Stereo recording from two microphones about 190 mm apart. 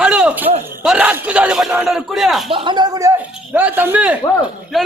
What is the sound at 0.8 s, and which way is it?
A man's voice, 5° right (ahead or behind).